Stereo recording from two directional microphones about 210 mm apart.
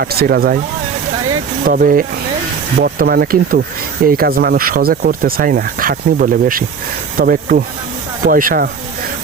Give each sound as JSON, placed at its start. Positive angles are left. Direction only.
{"t": 0.0, "sound": "speech", "side_deg": -45}
{"t": 1.6, "sound": "speech", "side_deg": -40}